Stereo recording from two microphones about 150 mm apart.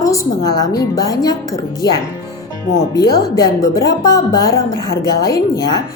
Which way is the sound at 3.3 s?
20° left (ahead or behind).